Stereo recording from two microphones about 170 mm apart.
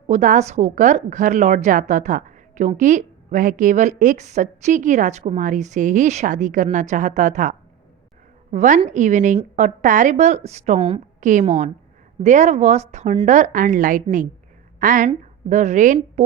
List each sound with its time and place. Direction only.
0.1 s a woman's voice: 45° right (ahead or behind)
11.2 s a woman's voice: 50° right (ahead or behind)